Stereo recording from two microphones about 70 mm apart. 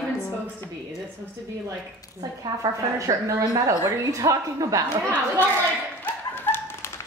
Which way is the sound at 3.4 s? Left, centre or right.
Right.